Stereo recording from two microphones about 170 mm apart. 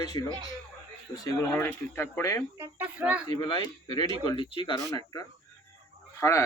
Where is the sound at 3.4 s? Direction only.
30° left (ahead or behind).